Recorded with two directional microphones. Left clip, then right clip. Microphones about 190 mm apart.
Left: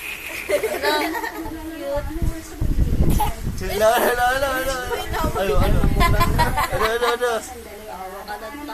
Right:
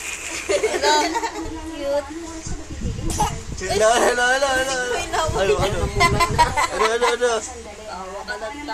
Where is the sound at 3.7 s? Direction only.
15° right (ahead or behind).